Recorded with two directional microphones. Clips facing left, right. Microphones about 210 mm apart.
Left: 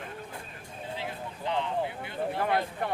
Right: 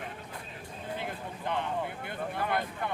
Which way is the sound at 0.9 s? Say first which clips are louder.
Even; 55° right (ahead or behind).